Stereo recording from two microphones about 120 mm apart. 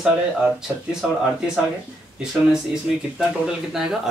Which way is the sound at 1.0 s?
5° right (ahead or behind).